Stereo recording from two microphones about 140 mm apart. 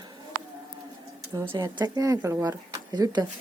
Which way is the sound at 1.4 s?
25° right (ahead or behind).